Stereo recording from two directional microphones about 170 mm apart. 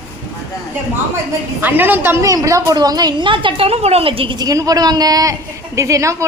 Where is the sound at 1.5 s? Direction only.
10° right (ahead or behind).